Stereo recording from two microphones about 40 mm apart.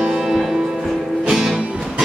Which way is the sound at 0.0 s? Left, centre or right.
Centre.